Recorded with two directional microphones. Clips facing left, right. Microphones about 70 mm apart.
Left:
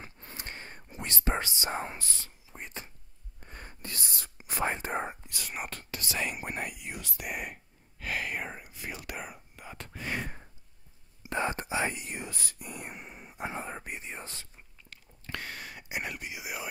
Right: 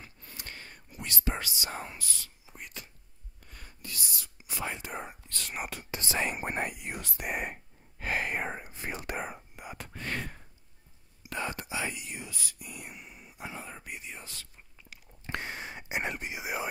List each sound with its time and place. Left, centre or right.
0.0 s whispering: left
5.4 s speech: centre
5.8 s speech: right
8.0 s whispering: right
9.9 s a sound: centre
11.2 s whispering: left
14.9 s whispering: right